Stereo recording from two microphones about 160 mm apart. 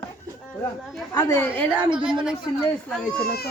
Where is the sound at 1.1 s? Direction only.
15° left (ahead or behind).